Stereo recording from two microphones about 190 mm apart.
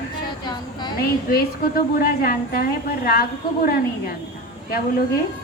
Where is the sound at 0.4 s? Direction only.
25° left (ahead or behind).